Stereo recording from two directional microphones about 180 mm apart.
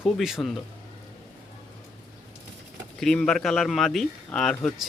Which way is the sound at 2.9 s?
5° left (ahead or behind).